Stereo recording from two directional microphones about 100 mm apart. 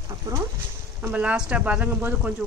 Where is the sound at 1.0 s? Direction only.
15° right (ahead or behind).